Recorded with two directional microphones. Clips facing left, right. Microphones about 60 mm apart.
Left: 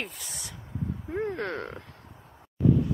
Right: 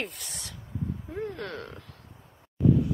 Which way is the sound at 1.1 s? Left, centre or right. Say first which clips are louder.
Left 7 dB; left.